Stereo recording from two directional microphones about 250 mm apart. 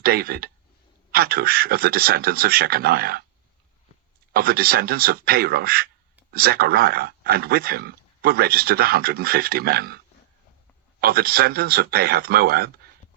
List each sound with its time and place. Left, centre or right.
0.0 s speech: right
4.3 s speech: right
11.0 s speech: right